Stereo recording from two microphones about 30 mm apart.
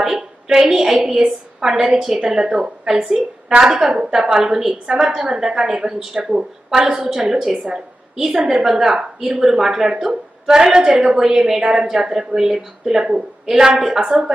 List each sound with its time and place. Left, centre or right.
0.0 s a sound: centre
0.7 s a woman's voice: centre
4.1 s a woman's voice: centre
4.9 s a woman's voice: right
5.1 s a woman's voice: centre